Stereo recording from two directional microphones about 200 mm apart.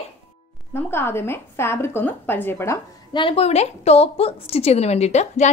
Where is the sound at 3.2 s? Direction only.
30° left (ahead or behind).